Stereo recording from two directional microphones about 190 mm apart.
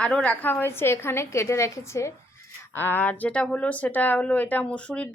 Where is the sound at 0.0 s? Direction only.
5° left (ahead or behind).